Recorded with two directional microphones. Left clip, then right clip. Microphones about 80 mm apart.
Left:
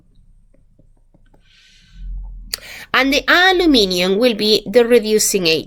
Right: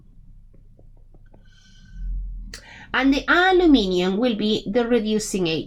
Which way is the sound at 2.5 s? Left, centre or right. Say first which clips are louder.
Left 7 dB; left.